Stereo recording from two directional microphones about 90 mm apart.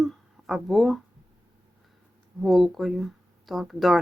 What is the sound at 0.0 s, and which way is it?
Speech, centre (ahead or behind).